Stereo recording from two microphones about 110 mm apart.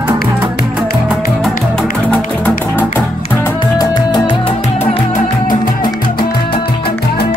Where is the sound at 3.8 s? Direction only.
40° left (ahead or behind).